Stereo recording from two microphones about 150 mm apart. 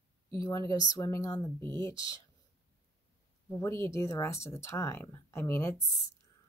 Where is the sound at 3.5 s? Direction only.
15° left (ahead or behind).